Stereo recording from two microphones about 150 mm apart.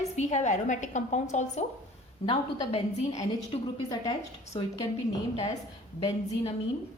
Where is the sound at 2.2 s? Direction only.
35° left (ahead or behind).